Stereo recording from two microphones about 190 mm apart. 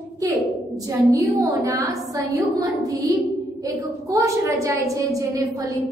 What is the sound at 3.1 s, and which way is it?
Music, 20° right (ahead or behind).